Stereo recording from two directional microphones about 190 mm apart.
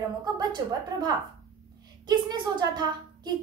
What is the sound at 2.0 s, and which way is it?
Speech, 20° right (ahead or behind).